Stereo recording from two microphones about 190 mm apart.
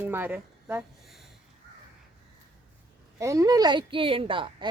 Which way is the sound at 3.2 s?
15° right (ahead or behind).